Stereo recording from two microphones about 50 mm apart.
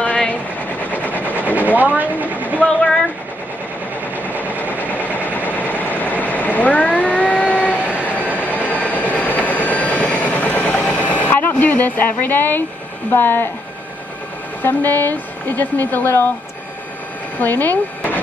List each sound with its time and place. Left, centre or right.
0.0 s train: left
1.5 s vehicle: right
2.5 s speech: left
4.2 s train: left
4.6 s vehicle: left
11.2 s speech: left
14.6 s speech: left
17.4 s speech: left